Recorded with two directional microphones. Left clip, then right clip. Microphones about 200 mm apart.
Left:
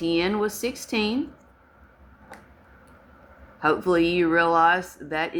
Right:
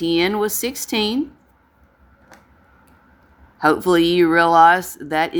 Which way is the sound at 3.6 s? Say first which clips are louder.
Right 6 dB; 50° right (ahead or behind).